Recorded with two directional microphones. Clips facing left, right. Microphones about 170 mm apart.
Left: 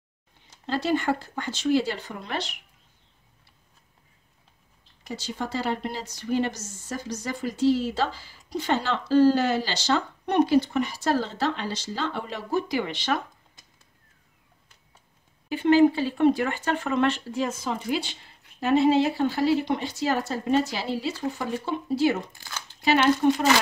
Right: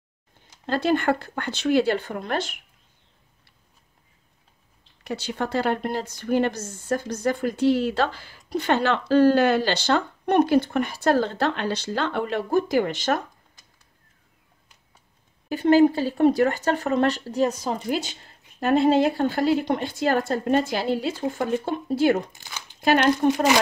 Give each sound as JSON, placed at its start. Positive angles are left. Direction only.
{"t": 0.7, "sound": "speech", "side_deg": -55}
{"t": 5.0, "sound": "speech", "side_deg": -65}
{"t": 15.5, "sound": "speech", "side_deg": -40}
{"t": 22.3, "sound": "a sound", "side_deg": -15}